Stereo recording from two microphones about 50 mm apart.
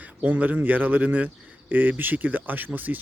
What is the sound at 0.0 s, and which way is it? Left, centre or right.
Speech, right.